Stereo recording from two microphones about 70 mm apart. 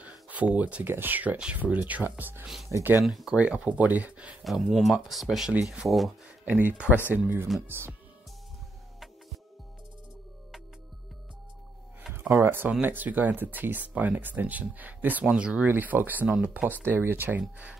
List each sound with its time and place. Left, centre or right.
0.3 s speech: right
0.8 s speech: right
3.1 s speech: centre
3.3 s speech: centre
4.4 s speech: centre
6.4 s speech: right
12.1 s speech: right; by 15.7 s centre
15.7 s speech: right
16.8 s speech: right